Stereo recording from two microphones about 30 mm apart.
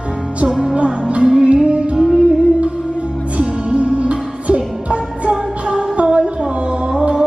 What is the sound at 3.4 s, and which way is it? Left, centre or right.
Music, right.